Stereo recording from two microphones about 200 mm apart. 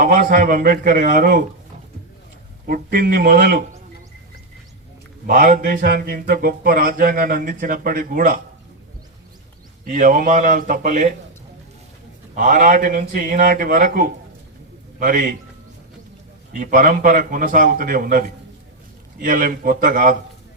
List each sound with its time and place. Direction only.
0.0 s speech: 45° right (ahead or behind)
2.6 s speech: 50° right (ahead or behind)
5.2 s speech: 45° right (ahead or behind)
9.8 s a man's voice: 40° right (ahead or behind)
12.3 s a man's voice: 40° right (ahead or behind)
16.5 s speech: 40° right (ahead or behind)